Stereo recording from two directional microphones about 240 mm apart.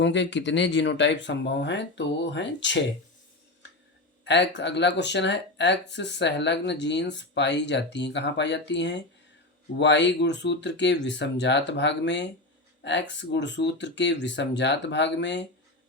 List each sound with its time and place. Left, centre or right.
0.0 s speech: left
4.2 s speech: left